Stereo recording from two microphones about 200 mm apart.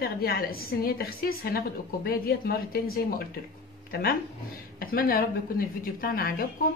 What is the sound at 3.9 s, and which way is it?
A woman's voice, 50° left (ahead or behind).